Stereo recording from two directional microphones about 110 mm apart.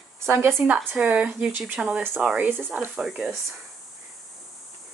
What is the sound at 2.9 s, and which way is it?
Speech, 5° right (ahead or behind).